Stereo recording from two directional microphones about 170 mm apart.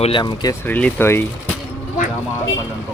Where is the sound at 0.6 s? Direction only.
10° left (ahead or behind).